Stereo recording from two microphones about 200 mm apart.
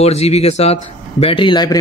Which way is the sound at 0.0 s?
30° left (ahead or behind).